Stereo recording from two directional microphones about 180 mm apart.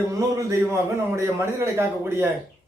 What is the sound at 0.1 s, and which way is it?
A man's voice, 15° right (ahead or behind).